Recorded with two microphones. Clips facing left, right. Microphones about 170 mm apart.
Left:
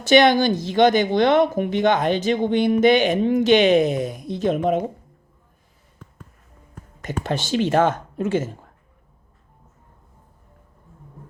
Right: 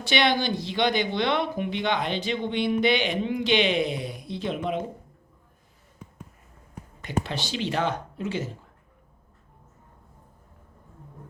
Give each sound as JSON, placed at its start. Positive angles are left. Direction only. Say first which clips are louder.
{"t": 0.0, "sound": "speech", "louder": "left 9 dB", "side_deg": 45}
{"t": 7.0, "sound": "speech", "louder": "left 4 dB", "side_deg": 45}